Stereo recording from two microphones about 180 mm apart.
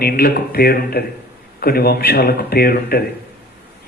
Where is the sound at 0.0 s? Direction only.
55° left (ahead or behind).